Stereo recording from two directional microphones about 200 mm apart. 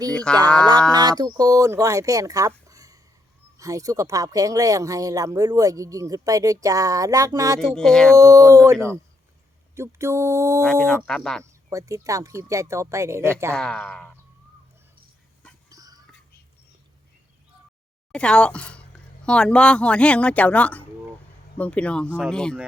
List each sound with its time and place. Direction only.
0.1 s speech: 5° left (ahead or behind)
0.9 s a sound: 20° right (ahead or behind)
1.2 s speech: 20° right (ahead or behind)
2.6 s a sound: 15° right (ahead or behind)
3.6 s speech: 15° right (ahead or behind)
7.6 s speech: centre (ahead or behind)
8.1 s speech: 15° right (ahead or behind)
10.6 s speech: 5° left (ahead or behind)
11.7 s speech: 15° right (ahead or behind)
13.5 s speech: 5° left (ahead or behind)
15.7 s a sound: 15° right (ahead or behind)
18.1 s speech: 5° left (ahead or behind)